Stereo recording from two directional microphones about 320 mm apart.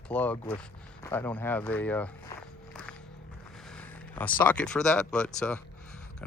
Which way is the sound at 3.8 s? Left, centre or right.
Centre.